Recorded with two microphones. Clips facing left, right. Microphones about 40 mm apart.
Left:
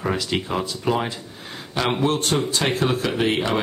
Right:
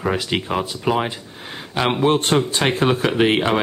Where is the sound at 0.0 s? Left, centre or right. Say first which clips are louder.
Right 2 dB; centre.